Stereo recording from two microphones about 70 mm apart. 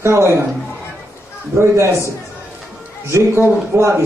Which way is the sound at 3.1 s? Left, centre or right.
Right.